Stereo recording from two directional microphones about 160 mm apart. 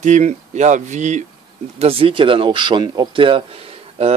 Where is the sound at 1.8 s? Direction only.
35° right (ahead or behind).